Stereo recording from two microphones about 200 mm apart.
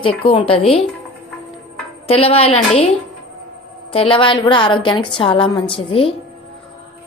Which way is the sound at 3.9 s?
25° left (ahead or behind).